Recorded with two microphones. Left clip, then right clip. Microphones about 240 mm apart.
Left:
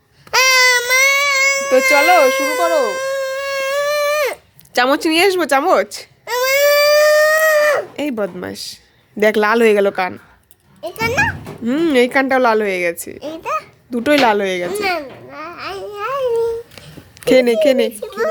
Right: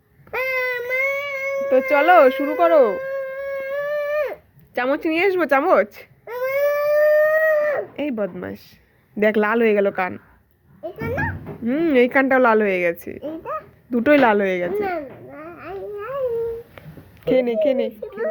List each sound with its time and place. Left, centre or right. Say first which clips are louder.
0.3 s baby cry: left 11 dB; left
2.0 s speech: left 2 dB; centre
3.0 s baby cry: left 6 dB; left; by 6.1 s centre
6.6 s a sound: left 5 dB; left
7.9 s a child's voice: left 4 dB; left
13.2 s a child's voice: left 7 dB; left
13.9 s a child's voice: left 2 dB; centre
14.8 s babbling: left 6 dB; left
17.2 s a child's voice: left 6 dB; left